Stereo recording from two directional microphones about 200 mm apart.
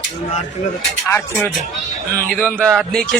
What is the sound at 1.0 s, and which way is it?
A man's voice, 10° left (ahead or behind).